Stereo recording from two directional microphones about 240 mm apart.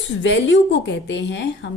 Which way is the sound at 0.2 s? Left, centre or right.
Left.